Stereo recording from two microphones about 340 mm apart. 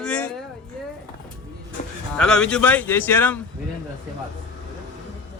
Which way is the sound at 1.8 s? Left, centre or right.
Left.